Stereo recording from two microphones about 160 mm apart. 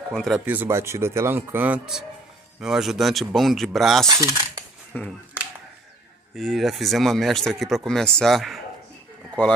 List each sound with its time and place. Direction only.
0.1 s speech: centre (ahead or behind)
0.5 s speech: 15° right (ahead or behind)
4.2 s cutlery: 20° right (ahead or behind)
4.9 s speech: 10° left (ahead or behind)
6.3 s speech: centre (ahead or behind)